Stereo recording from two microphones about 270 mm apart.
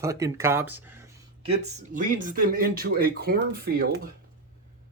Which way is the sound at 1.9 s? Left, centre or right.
Right.